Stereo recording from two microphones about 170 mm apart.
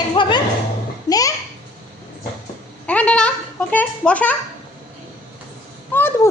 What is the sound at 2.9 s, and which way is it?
A child's voice, 5° left (ahead or behind).